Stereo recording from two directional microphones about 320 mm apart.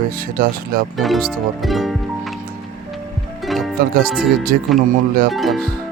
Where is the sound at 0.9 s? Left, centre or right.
Centre.